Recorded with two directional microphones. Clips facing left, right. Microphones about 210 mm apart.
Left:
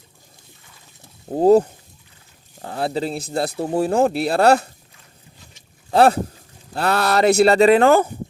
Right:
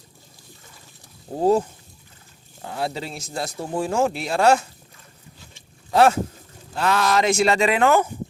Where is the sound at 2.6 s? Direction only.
35° left (ahead or behind).